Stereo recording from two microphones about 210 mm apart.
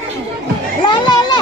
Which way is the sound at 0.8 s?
20° left (ahead or behind).